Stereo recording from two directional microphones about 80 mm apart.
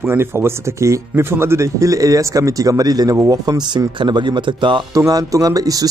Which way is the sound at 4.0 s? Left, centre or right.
Right.